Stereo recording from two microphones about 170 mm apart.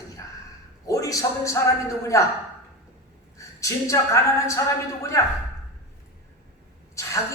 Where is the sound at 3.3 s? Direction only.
20° left (ahead or behind).